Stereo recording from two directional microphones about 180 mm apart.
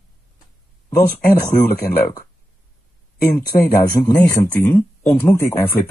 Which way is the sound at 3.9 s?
15° left (ahead or behind).